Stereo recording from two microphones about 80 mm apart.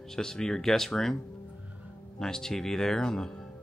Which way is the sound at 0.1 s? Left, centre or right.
Centre.